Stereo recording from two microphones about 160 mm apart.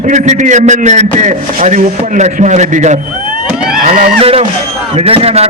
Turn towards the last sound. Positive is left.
turn(degrees=-40)  # may be behind; listen again after turning